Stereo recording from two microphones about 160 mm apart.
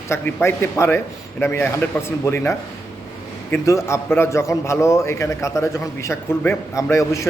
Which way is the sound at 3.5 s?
15° left (ahead or behind).